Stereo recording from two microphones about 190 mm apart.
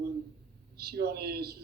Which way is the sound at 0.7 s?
55° right (ahead or behind).